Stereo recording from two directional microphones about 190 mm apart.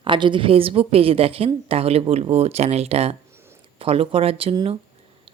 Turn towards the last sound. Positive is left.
turn(degrees=-30)  # may be behind; listen again after turning